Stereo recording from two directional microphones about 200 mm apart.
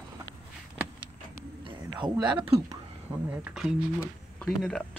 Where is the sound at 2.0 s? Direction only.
20° right (ahead or behind).